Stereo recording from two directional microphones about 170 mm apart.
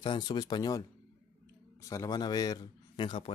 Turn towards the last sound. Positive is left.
turn(degrees=30)  # may be behind; listen again after turning